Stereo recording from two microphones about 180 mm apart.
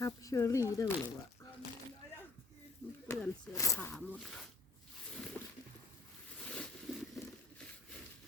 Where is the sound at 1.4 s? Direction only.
15° left (ahead or behind).